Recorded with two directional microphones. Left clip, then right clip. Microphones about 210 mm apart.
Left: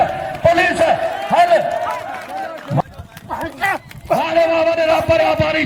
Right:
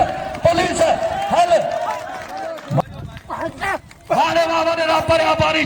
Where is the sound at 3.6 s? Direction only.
5° left (ahead or behind).